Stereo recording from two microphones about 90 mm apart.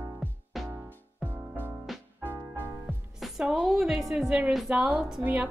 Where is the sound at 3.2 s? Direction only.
5° right (ahead or behind).